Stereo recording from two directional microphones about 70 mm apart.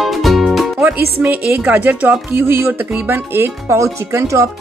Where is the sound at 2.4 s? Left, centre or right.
Right.